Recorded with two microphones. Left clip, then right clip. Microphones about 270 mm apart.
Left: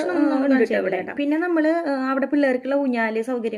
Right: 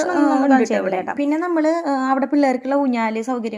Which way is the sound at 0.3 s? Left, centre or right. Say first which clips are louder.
Right 3 dB; centre.